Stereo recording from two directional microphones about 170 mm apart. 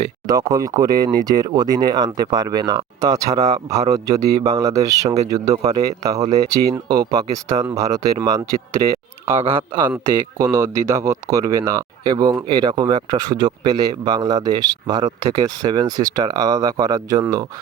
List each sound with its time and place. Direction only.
0.3 s speech: 20° right (ahead or behind)